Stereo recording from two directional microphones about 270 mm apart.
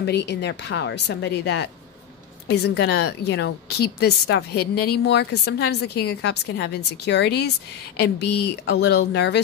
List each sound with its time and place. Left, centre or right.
0.0 s a woman's voice: left